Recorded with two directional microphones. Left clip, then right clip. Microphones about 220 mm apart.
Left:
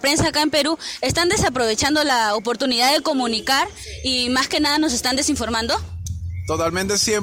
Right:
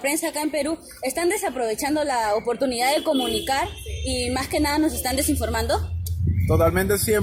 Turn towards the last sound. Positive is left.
turn(degrees=45)  # may be behind; listen again after turning